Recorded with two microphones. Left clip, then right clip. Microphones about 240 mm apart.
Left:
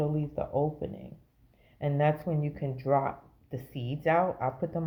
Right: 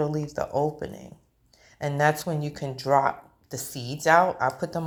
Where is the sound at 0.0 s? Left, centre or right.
Right.